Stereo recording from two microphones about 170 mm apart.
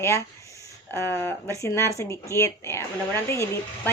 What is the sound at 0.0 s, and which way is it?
Speech, 15° left (ahead or behind).